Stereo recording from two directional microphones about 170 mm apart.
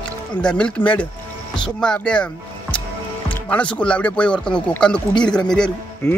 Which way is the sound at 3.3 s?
5° left (ahead or behind).